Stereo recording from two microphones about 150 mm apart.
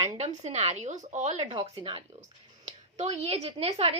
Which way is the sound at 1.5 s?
35° right (ahead or behind).